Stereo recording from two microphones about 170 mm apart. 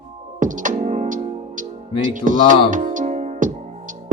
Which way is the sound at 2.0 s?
50° right (ahead or behind).